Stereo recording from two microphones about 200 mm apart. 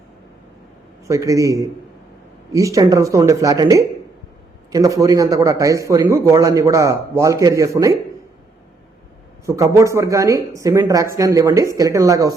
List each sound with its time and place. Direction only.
1.0 s a man's voice: 15° right (ahead or behind)
9.5 s a man's voice: 15° right (ahead or behind)